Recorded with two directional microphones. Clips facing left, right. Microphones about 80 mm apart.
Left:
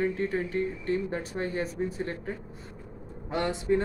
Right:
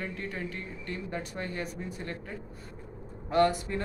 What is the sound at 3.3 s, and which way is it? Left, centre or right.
Speech, centre.